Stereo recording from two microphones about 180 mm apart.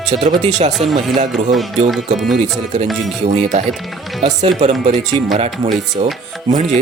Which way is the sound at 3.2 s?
40° right (ahead or behind).